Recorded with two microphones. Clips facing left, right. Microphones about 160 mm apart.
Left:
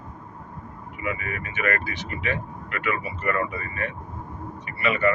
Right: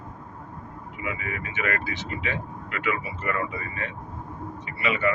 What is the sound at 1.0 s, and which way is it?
Speech, 15° right (ahead or behind).